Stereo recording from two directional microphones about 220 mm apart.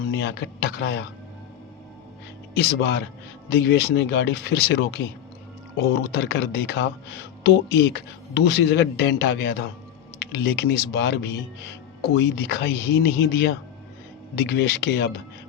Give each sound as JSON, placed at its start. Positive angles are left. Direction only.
{"t": 0.0, "sound": "speech", "side_deg": 45}
{"t": 2.6, "sound": "speech", "side_deg": 45}